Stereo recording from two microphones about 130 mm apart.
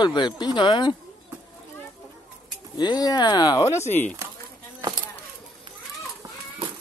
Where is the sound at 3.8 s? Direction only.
60° left (ahead or behind).